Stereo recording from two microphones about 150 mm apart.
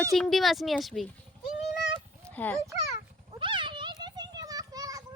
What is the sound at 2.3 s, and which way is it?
Speech, 10° left (ahead or behind).